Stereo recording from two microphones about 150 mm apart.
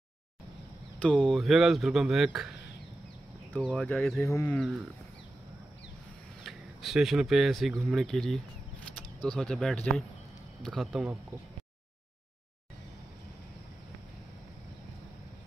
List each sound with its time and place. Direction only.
0.9 s speech: 5° left (ahead or behind)
3.5 s speech: 5° left (ahead or behind)
4.3 s speech: 20° left (ahead or behind)
4.6 s speech: 5° right (ahead or behind)
6.4 s speech: centre (ahead or behind)